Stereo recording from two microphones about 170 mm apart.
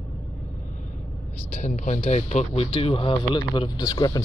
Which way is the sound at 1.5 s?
45° left (ahead or behind).